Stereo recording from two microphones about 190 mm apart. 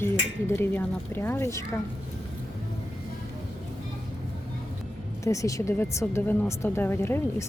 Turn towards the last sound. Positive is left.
turn(degrees=10)  # may be behind; listen again after turning